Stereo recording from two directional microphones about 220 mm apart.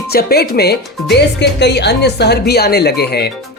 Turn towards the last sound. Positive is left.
turn(degrees=45)  # may be behind; listen again after turning